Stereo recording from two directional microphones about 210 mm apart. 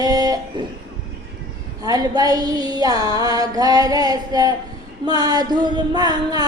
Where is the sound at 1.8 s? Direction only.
20° right (ahead or behind).